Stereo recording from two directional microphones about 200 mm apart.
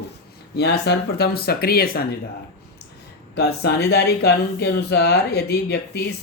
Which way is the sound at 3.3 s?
55° left (ahead or behind).